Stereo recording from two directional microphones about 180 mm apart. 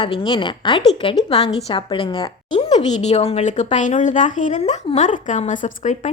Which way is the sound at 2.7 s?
35° left (ahead or behind).